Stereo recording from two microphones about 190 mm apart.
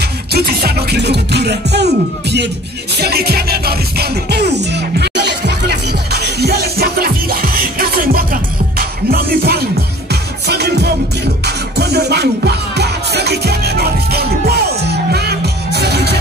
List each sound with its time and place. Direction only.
0.3 s music: 55° right (ahead or behind)